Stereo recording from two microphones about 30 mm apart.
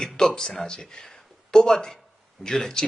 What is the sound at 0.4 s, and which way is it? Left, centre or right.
Speech, left.